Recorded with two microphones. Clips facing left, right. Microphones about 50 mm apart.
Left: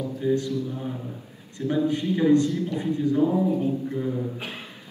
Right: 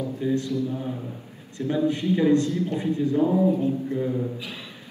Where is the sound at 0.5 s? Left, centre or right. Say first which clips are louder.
Right 2 dB; right.